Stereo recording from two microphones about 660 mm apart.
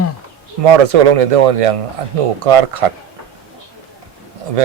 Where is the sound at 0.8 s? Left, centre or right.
Right.